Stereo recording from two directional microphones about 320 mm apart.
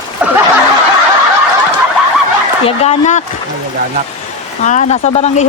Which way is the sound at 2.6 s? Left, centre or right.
Centre.